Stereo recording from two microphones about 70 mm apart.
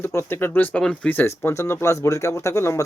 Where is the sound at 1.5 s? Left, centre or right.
Left.